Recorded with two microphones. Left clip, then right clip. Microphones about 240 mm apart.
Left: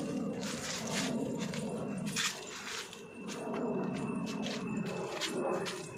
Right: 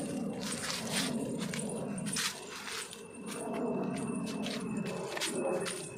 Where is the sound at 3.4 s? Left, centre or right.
Centre.